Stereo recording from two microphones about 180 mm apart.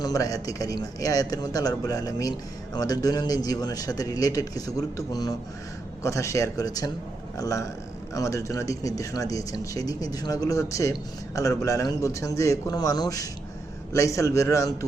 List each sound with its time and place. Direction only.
0.0 s a man's voice: 20° left (ahead or behind)